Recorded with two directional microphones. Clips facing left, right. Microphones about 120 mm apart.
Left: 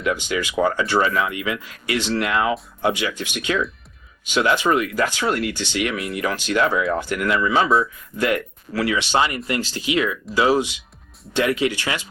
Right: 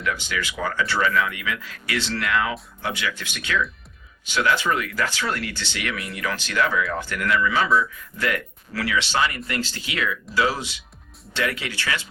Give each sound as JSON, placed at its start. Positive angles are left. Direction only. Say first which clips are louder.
{"t": 0.0, "sound": "speech", "louder": "left 5 dB", "side_deg": 20}